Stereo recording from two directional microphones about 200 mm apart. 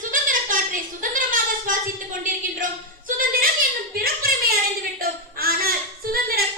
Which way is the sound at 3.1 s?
45° right (ahead or behind).